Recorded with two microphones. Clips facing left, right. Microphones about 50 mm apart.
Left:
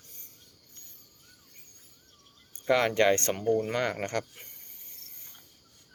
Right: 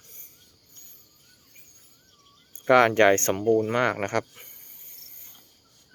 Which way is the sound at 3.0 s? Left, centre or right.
Right.